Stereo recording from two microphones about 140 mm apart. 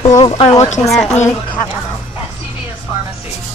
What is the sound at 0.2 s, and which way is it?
Speech, 40° left (ahead or behind).